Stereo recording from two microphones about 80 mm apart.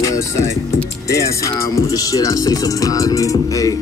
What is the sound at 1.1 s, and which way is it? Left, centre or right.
Music, left.